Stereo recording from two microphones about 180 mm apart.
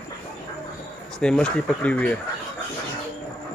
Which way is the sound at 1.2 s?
5° left (ahead or behind).